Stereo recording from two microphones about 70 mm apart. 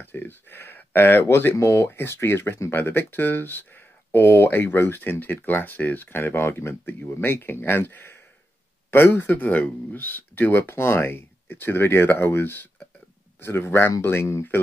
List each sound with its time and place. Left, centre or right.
0.0 s speech: left
1.6 s speech: left